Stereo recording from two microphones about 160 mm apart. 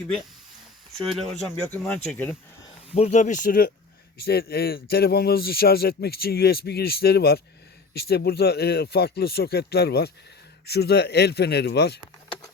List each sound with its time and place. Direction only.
1.1 s speech: centre (ahead or behind)
2.9 s speech: 45° left (ahead or behind)
4.2 s speech: 75° left (ahead or behind)